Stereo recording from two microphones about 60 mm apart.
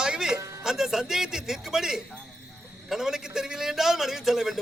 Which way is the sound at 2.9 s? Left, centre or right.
Centre.